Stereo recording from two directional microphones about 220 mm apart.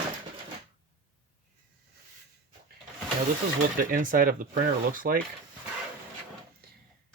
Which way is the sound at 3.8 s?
40° right (ahead or behind).